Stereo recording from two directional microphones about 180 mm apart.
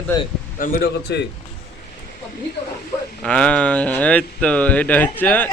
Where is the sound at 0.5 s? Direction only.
50° left (ahead or behind).